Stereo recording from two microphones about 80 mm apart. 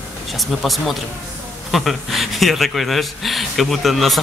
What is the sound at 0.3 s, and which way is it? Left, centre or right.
Speech, centre.